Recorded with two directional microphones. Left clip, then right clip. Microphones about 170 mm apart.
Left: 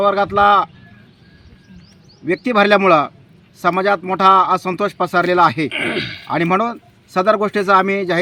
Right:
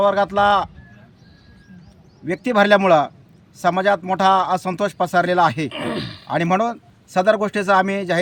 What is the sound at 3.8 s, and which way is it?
Speech, 35° right (ahead or behind).